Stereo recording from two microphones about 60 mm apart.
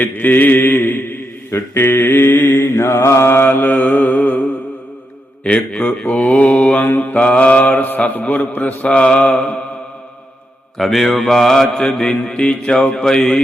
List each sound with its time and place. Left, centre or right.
0.0 s mantra: left
6.0 s mantra: centre
6.7 s mantra: left
10.8 s mantra: centre